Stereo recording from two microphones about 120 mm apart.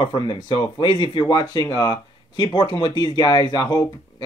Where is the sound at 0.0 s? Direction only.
40° left (ahead or behind).